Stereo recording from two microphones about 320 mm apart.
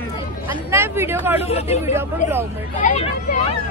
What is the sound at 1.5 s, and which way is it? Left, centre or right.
Speech, centre.